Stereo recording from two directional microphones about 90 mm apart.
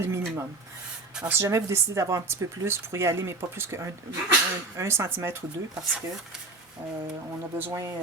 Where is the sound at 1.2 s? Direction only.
30° right (ahead or behind).